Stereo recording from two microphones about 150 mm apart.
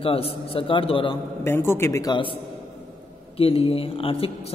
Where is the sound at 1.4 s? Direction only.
15° left (ahead or behind); by 2.4 s 30° left (ahead or behind).